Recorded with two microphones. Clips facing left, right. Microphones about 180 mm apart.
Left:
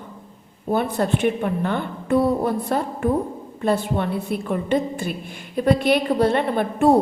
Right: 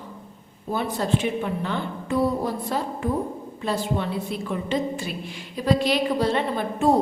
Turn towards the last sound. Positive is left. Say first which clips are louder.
# left 4 dB
turn(degrees=60)  # may be behind; listen again after turning